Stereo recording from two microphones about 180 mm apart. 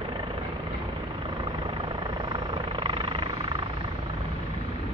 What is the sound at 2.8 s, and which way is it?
Vehicle, 30° right (ahead or behind).